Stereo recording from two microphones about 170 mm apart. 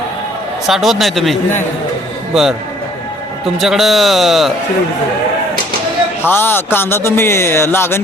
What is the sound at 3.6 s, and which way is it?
Speech, centre (ahead or behind).